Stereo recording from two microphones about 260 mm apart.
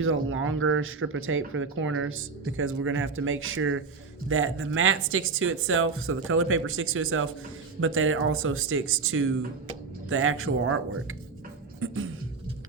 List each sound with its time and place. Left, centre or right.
0.0 s speech: right